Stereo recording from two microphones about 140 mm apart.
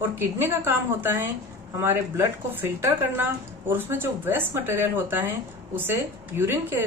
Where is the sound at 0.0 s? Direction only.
15° right (ahead or behind).